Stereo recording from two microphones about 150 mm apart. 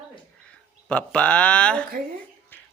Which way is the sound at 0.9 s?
10° left (ahead or behind).